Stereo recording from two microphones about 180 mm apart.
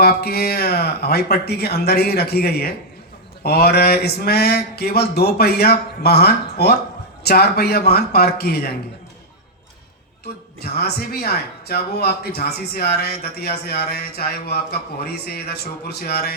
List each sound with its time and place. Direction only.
0.0 s speech: 60° left (ahead or behind)
10.6 s speech: 60° left (ahead or behind)